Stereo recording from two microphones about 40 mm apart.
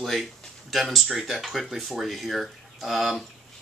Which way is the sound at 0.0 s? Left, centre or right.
Centre.